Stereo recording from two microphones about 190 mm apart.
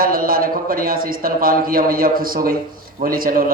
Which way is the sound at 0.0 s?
50° right (ahead or behind).